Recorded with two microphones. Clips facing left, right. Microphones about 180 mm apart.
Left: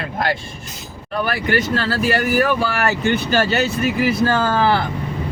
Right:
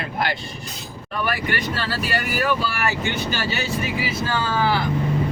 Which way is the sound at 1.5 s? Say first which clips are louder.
Left 7 dB; 45° left (ahead or behind).